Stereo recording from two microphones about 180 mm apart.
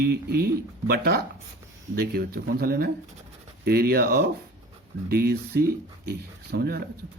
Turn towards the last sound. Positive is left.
turn(degrees=-60)  # may be behind; listen again after turning